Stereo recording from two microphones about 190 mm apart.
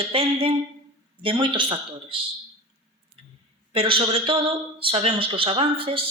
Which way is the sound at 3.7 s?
30° right (ahead or behind).